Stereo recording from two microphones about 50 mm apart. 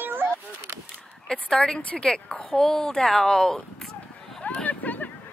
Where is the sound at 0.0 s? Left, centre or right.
Right.